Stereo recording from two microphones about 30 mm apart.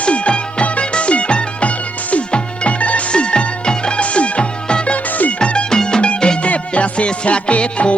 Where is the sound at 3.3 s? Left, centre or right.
Left.